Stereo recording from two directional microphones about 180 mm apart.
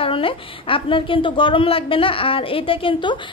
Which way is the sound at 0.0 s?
30° left (ahead or behind).